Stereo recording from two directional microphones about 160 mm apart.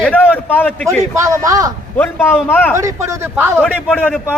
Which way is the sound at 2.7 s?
20° right (ahead or behind).